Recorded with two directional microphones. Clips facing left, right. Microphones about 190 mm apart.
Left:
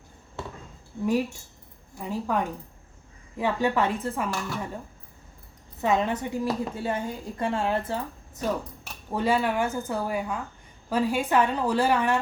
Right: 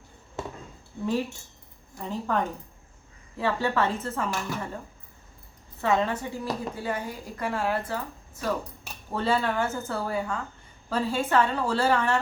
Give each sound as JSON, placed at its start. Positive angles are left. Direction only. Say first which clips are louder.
{"t": 1.0, "sound": "a woman's voice", "louder": "left 3 dB", "side_deg": 15}
{"t": 5.8, "sound": "a woman's voice", "louder": "left 1 dB", "side_deg": 20}